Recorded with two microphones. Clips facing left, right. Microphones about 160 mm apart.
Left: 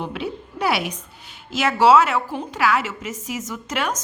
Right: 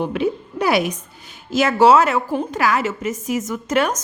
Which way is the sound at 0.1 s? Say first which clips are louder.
Right 8 dB; 50° right (ahead or behind).